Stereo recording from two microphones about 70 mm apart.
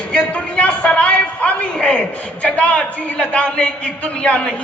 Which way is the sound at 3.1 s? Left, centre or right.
Centre.